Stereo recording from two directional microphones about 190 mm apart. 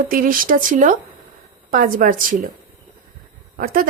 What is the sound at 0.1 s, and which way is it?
Speech, 45° right (ahead or behind).